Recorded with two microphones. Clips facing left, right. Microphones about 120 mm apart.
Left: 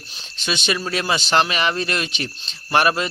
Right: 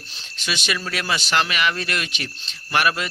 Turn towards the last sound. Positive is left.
turn(degrees=30)  # may be behind; listen again after turning